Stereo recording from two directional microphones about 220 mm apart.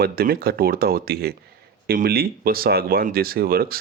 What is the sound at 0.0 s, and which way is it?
Speech, 45° right (ahead or behind).